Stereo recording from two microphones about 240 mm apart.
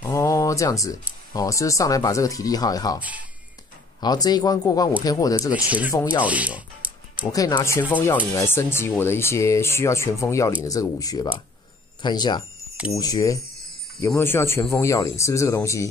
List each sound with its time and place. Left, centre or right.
0.0 s speech: centre
3.0 s speech: centre
4.0 s speech: centre
6.2 s music: centre
7.3 s speech: centre